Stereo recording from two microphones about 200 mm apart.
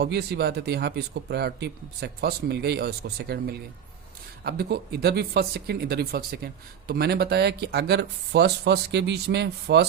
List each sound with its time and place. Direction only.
0.0 s speech: 55° right (ahead or behind)